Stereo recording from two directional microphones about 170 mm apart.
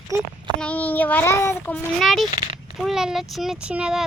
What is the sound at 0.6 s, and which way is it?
A child's voice, 10° left (ahead or behind).